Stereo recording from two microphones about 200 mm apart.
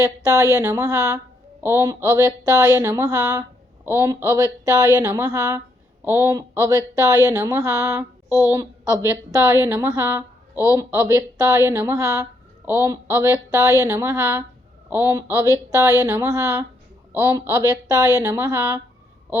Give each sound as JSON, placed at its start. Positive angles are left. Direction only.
{"t": 0.0, "sound": "a woman's voice", "side_deg": -20}